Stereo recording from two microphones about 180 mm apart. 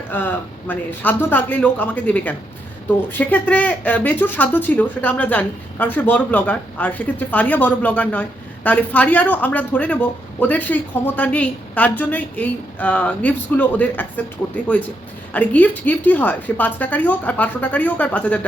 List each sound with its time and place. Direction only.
0.1 s speech: 10° left (ahead or behind)